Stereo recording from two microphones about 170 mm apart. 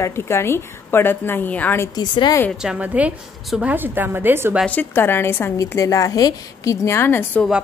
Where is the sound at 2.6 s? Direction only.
5° right (ahead or behind).